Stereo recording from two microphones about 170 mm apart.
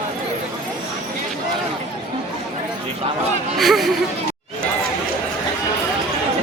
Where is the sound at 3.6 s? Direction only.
Centre (ahead or behind).